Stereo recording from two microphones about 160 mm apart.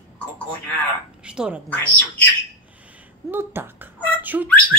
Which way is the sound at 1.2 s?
5° right (ahead or behind).